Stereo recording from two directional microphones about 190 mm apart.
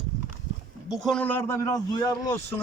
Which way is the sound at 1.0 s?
5° left (ahead or behind).